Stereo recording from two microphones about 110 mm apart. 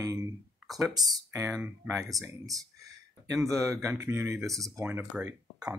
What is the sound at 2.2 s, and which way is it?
Speech, 30° right (ahead or behind).